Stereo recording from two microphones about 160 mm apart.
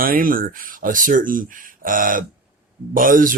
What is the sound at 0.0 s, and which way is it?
Speech, 60° right (ahead or behind).